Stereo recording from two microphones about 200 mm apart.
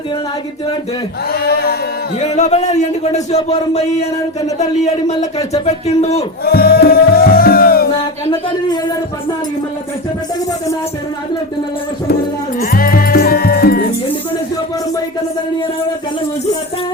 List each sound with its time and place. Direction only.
1.3 s a sound: 50° left (ahead or behind)
2.3 s speech: 35° left (ahead or behind)
6.4 s music: 50° left (ahead or behind)
12.5 s music: 45° left (ahead or behind)